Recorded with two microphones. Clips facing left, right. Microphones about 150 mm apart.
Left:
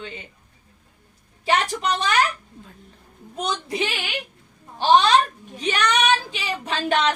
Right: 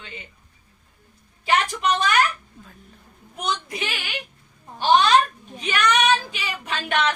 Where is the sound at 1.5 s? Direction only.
35° left (ahead or behind).